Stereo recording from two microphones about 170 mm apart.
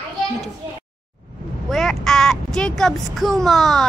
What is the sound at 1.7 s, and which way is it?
Crow, centre (ahead or behind).